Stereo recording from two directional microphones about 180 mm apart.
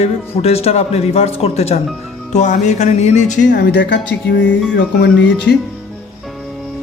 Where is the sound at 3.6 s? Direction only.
70° left (ahead or behind).